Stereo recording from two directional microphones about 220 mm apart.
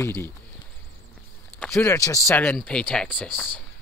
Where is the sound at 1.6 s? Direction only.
5° left (ahead or behind).